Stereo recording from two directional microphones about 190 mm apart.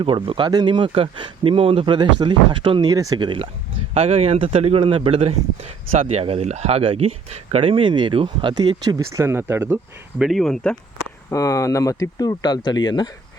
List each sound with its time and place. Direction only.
0.0 s speech: 30° right (ahead or behind); by 10.8 s 5° left (ahead or behind)
11.3 s speech: 15° left (ahead or behind)